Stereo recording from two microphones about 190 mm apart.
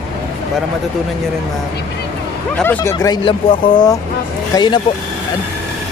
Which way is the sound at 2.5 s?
10° left (ahead or behind).